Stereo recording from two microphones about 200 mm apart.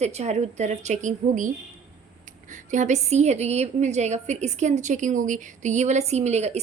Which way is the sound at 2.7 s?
35° right (ahead or behind).